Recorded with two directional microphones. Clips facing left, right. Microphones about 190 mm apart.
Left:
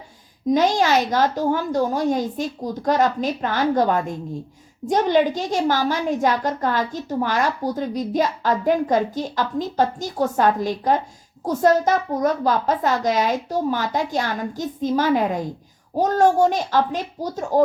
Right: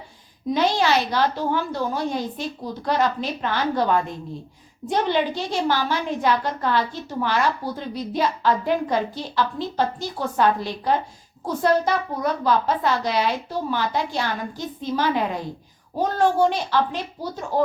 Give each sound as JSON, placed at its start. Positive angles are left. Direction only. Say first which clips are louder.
{"t": 0.5, "sound": "a woman's voice", "louder": "left 3 dB", "side_deg": 45}